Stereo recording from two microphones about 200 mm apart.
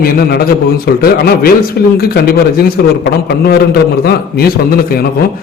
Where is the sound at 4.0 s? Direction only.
50° left (ahead or behind).